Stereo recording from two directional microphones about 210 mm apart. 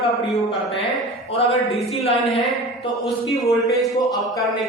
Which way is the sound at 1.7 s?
25° left (ahead or behind).